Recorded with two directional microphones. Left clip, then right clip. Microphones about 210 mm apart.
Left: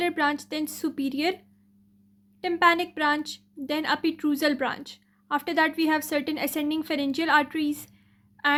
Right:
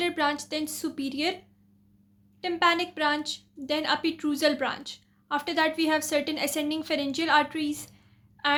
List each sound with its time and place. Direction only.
0.0 s a woman's voice: 30° left (ahead or behind)
2.4 s a woman's voice: 30° left (ahead or behind)